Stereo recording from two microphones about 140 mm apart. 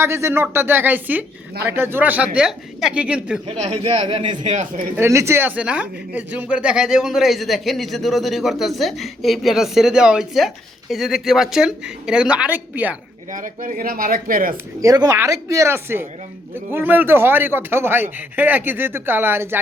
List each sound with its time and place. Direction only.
0.0 s speech: 20° right (ahead or behind)
3.4 s a man's voice: 50° right (ahead or behind)
4.4 s a man's voice: 60° right (ahead or behind)
4.9 s speech: 20° right (ahead or behind)
13.3 s speech: 70° right (ahead or behind); by 14.5 s 90° right
14.5 s speech: 25° right (ahead or behind)